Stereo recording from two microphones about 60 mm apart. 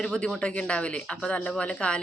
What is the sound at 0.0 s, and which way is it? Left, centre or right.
Speech, centre.